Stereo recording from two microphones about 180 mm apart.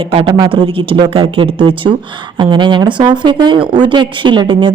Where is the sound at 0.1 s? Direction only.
30° right (ahead or behind).